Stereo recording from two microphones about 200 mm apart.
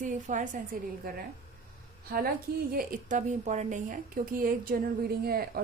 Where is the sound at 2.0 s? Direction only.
45° right (ahead or behind).